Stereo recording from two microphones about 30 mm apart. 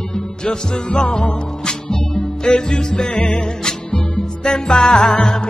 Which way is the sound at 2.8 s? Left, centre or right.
Left.